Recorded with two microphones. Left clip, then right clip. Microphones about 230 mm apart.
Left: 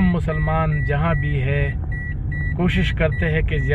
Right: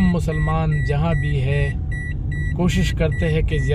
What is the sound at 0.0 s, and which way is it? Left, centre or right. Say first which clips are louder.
Speech: even; centre.